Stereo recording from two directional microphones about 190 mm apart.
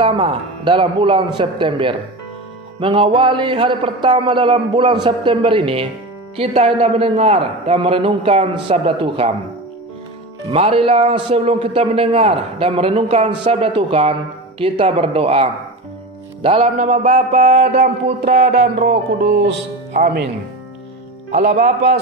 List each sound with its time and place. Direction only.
0.0 s a man's voice: 25° right (ahead or behind)
10.5 s a man's voice: 30° right (ahead or behind)
16.7 s a man's voice: 40° right (ahead or behind)
18.2 s a sound: 55° right (ahead or behind)
19.9 s speech: 45° right (ahead or behind)
21.3 s speech: 40° right (ahead or behind)